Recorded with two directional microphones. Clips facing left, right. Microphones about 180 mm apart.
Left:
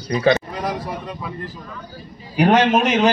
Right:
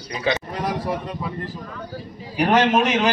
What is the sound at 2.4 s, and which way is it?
Speech, 20° left (ahead or behind).